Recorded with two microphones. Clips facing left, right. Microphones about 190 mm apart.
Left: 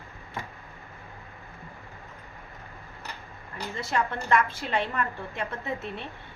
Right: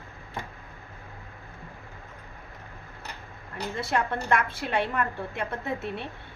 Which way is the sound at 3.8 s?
60° right (ahead or behind).